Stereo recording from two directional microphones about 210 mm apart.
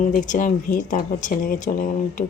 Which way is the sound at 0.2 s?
40° left (ahead or behind).